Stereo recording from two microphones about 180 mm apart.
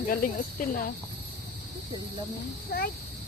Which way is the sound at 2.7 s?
55° left (ahead or behind).